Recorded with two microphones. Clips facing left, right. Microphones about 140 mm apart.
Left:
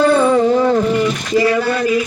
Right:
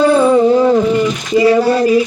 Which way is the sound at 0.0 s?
10° right (ahead or behind).